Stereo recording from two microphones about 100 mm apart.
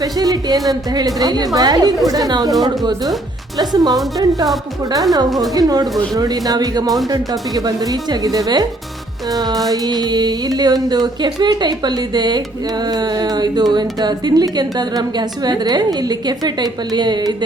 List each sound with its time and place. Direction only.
0.0 s speech: 40° right (ahead or behind)
2.6 s carnatic music: 45° right (ahead or behind)
5.4 s speech: 40° right (ahead or behind)
9.6 s carnatic music: 40° right (ahead or behind)